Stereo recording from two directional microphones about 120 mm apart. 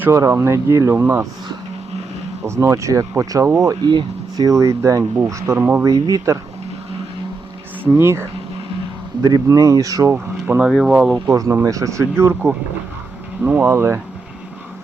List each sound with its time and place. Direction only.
0.2 s speech: 25° right (ahead or behind)
2.4 s speech: 25° right (ahead or behind)
5.8 s speech: 30° right (ahead or behind)
7.9 s speech: 20° right (ahead or behind)
10.1 s speech: 15° right (ahead or behind)
11.3 s speech: 25° right (ahead or behind)